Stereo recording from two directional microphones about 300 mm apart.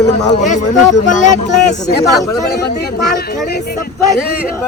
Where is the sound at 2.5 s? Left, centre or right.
Left.